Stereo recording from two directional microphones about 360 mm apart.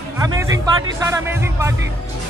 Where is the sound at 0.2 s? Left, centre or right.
Centre.